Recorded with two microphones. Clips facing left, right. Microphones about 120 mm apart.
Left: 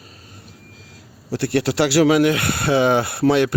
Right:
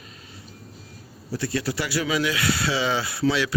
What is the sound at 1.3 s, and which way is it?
Speech, 65° left (ahead or behind).